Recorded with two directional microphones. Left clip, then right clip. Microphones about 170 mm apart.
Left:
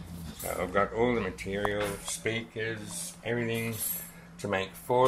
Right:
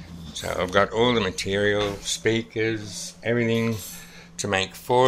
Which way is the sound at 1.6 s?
45° right (ahead or behind).